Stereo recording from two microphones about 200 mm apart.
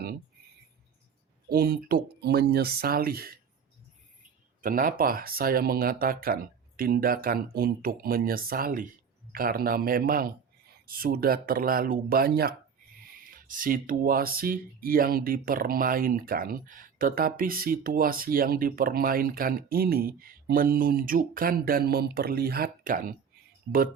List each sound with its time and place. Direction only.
1.5 s speech: 50° right (ahead or behind)
4.6 s speech: 45° right (ahead or behind)